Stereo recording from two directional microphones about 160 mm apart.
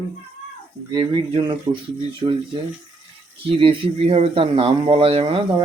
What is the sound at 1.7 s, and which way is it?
Speech, 30° right (ahead or behind).